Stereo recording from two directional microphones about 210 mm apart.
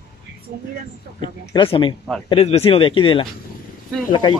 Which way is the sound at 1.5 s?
25° left (ahead or behind).